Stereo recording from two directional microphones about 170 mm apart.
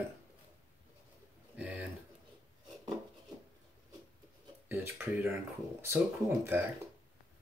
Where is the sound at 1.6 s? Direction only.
5° right (ahead or behind).